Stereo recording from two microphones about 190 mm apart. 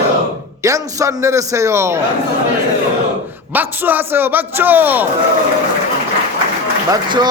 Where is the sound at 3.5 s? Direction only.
10° right (ahead or behind).